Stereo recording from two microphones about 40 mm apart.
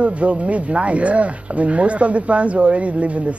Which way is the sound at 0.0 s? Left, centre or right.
Right.